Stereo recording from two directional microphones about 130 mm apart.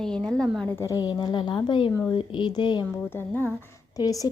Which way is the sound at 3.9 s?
25° left (ahead or behind).